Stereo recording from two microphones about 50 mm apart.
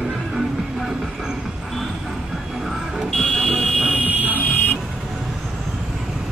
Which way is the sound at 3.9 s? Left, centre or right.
Right.